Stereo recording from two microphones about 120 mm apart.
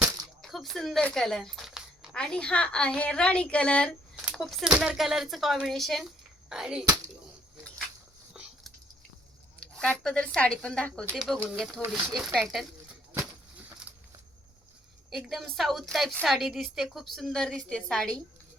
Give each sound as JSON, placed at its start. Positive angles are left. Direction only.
{"t": 0.4, "sound": "a sound", "side_deg": 0}
{"t": 2.1, "sound": "a woman's voice", "side_deg": 5}
{"t": 8.3, "sound": "dog", "side_deg": -5}
{"t": 9.6, "sound": "a woman's voice", "side_deg": 10}
{"t": 15.1, "sound": "a woman's voice", "side_deg": 0}